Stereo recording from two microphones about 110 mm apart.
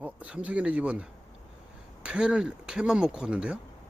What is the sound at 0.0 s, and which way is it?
Speech, 15° right (ahead or behind).